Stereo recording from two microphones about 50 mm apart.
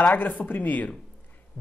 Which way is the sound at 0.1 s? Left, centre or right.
Left.